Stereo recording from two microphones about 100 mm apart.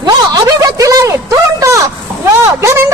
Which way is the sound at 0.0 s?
40° right (ahead or behind).